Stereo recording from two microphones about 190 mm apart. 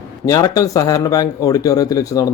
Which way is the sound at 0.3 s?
20° left (ahead or behind).